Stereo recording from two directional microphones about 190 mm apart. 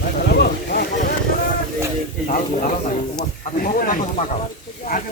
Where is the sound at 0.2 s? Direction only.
55° left (ahead or behind).